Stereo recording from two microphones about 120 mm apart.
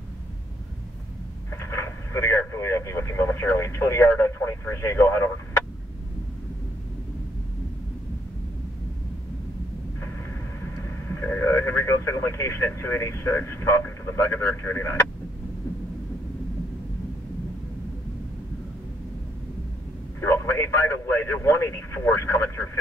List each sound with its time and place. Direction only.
1.6 s speech: 20° left (ahead or behind)
10.6 s speech: 20° left (ahead or behind)
20.2 s a man's voice: 20° left (ahead or behind)